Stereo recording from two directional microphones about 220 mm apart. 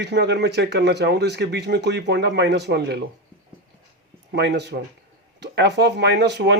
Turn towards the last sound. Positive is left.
turn(degrees=-50)  # may be behind; listen again after turning